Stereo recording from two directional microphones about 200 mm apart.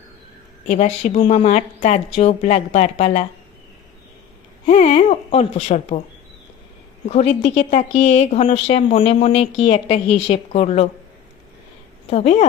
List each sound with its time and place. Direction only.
0.7 s a woman's voice: 35° left (ahead or behind)
4.6 s a woman's voice: 30° left (ahead or behind)
7.1 s a woman's voice: 30° left (ahead or behind)
12.1 s a woman's voice: 30° left (ahead or behind)